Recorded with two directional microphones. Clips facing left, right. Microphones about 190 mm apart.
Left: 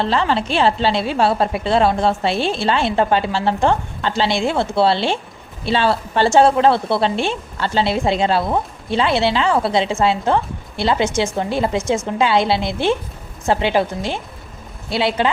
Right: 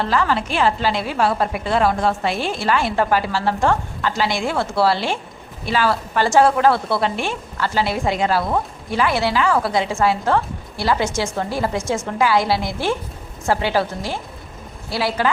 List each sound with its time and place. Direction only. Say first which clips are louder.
0.0 s a woman's voice: left 2 dB; 25° left (ahead or behind)